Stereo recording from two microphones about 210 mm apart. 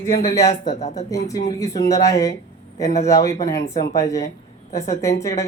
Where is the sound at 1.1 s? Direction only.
15° left (ahead or behind).